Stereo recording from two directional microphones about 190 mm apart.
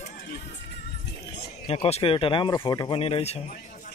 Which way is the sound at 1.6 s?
30° left (ahead or behind).